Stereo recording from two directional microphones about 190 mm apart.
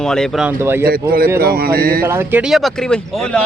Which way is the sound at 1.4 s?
55° right (ahead or behind).